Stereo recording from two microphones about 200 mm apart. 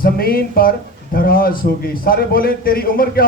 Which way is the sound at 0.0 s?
50° left (ahead or behind).